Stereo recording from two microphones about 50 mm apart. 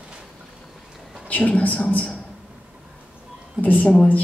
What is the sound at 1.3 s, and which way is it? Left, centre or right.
Speech, left.